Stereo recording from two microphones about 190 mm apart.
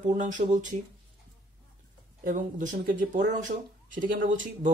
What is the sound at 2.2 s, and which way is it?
Speech, 45° right (ahead or behind).